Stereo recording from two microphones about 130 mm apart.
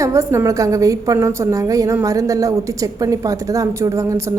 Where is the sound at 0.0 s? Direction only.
20° right (ahead or behind).